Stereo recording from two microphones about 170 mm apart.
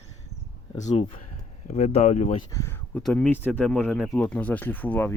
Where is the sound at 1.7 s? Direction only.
40° left (ahead or behind).